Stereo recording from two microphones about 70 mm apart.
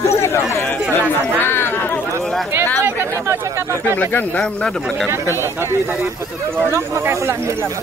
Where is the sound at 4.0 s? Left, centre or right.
Left.